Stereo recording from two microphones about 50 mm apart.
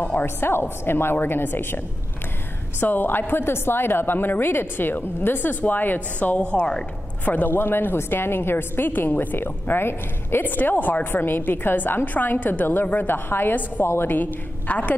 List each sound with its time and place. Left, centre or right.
0.0 s a woman's voice: left
0.4 s a woman's voice: left
2.8 s a woman's voice: left; by 6.9 s centre
7.2 s a woman's voice: left